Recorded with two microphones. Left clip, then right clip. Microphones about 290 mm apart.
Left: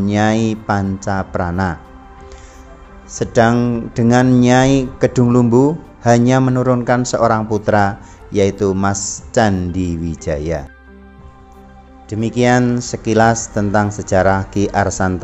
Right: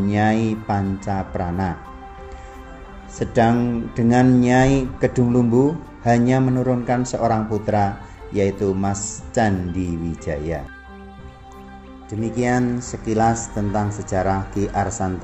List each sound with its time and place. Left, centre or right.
0.0 s speech: left
3.2 s speech: left
12.1 s speech: left